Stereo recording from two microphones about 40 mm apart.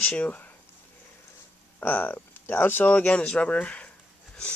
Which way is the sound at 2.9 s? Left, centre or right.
Left.